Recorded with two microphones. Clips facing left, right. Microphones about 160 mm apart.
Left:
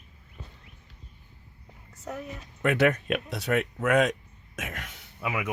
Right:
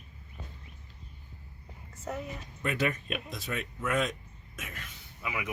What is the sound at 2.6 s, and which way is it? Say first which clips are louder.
Speech: left 8 dB; 80° left.